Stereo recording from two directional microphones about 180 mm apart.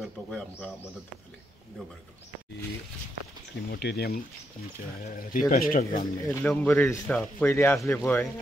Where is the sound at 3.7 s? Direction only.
60° left (ahead or behind).